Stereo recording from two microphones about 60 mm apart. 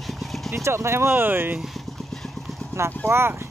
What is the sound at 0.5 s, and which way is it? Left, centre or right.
Speech, right.